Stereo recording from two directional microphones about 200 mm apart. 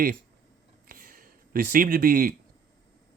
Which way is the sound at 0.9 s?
45° right (ahead or behind).